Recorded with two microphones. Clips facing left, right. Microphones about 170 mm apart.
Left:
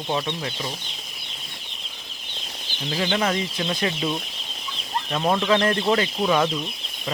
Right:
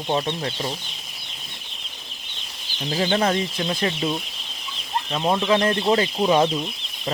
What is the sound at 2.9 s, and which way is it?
Speech, 35° right (ahead or behind).